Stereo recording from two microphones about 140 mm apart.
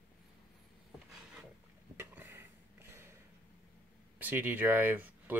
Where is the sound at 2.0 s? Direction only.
15° right (ahead or behind).